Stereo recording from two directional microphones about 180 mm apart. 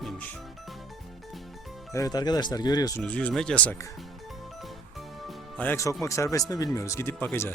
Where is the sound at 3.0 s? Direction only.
5° left (ahead or behind).